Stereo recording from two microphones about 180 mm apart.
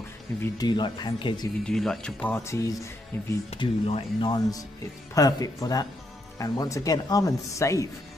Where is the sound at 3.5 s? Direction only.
30° left (ahead or behind).